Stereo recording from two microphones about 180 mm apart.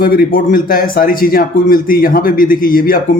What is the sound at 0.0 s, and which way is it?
A man's voice, 50° left (ahead or behind).